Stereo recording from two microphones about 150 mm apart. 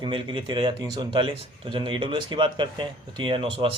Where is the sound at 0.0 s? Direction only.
35° right (ahead or behind).